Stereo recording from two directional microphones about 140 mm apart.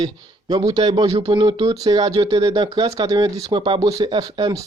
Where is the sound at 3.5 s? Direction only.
40° right (ahead or behind).